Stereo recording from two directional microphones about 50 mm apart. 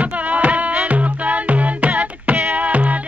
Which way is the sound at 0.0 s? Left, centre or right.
Right.